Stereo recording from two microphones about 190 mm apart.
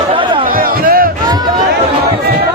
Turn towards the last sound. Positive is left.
turn(degrees=-50)  # may be behind; listen again after turning